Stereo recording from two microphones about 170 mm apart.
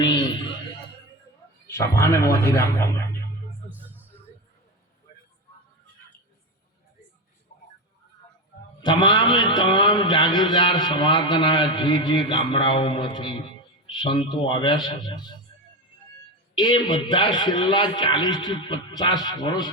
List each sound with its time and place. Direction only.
1.6 s a man's voice: 15° left (ahead or behind)
3.7 s music: 10° right (ahead or behind)
8.8 s a man's voice: 25° left (ahead or behind)
16.6 s a man's voice: 30° left (ahead or behind)